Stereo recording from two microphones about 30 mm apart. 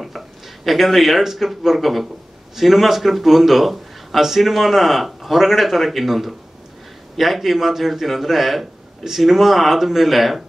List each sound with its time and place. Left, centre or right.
0.7 s a man's voice: centre